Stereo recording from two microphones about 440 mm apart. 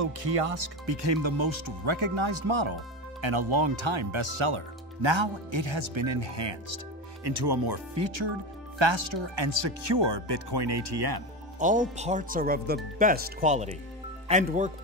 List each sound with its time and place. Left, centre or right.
0.8 s speech: right
7.2 s speech: right
11.6 s speech: centre